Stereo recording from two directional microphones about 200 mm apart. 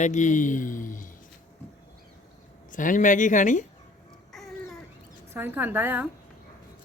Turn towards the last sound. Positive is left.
turn(degrees=-10)  # may be behind; listen again after turning